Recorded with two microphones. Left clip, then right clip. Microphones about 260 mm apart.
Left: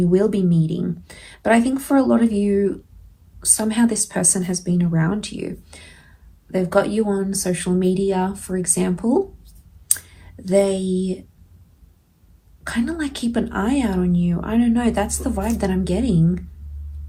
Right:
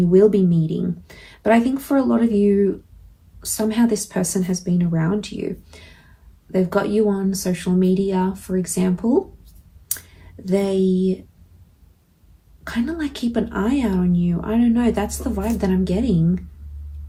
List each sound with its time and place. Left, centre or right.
0.0 s a woman's voice: left
12.6 s a woman's voice: left